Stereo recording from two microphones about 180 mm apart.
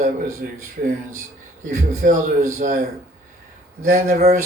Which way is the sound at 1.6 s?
45° right (ahead or behind).